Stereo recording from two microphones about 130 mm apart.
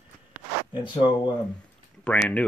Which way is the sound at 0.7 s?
40° left (ahead or behind).